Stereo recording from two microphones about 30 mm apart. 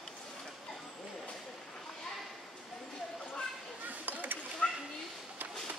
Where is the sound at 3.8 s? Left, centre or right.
Right.